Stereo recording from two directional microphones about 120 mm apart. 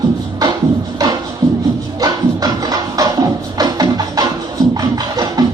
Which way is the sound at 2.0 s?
30° right (ahead or behind).